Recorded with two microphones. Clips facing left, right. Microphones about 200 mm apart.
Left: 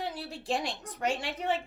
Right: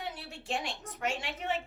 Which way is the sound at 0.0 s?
35° left (ahead or behind).